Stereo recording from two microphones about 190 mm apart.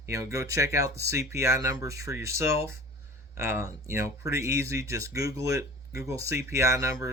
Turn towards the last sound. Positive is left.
turn(degrees=-15)  # may be behind; listen again after turning